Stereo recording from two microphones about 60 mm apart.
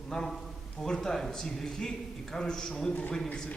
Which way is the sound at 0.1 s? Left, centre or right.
Centre.